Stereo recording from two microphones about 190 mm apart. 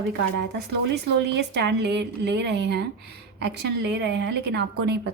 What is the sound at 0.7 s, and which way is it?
Speech, 60° right (ahead or behind).